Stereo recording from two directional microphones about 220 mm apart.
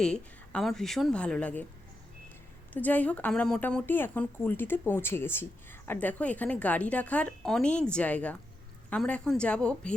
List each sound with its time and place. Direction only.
0.0 s a woman's voice: 5° left (ahead or behind)
2.7 s a woman's voice: 5° left (ahead or behind)